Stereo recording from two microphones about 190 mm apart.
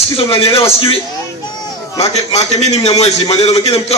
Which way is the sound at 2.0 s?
35° left (ahead or behind).